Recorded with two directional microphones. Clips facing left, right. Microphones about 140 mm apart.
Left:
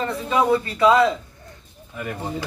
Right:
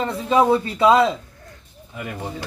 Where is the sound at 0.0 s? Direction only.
25° right (ahead or behind).